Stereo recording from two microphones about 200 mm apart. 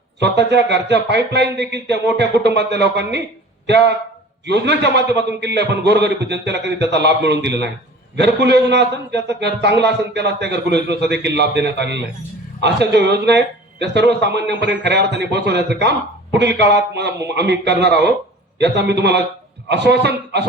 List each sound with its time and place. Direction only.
0.2 s speech: 60° right (ahead or behind)